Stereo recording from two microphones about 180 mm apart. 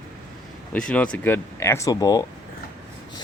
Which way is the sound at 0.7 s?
5° left (ahead or behind).